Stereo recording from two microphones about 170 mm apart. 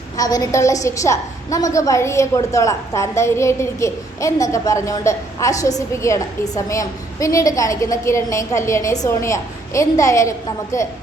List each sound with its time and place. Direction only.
0.2 s a woman's voice: 20° left (ahead or behind)